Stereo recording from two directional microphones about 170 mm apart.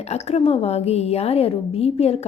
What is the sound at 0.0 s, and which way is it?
A woman's voice, 40° left (ahead or behind).